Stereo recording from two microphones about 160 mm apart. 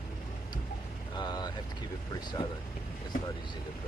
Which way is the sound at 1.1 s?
25° left (ahead or behind).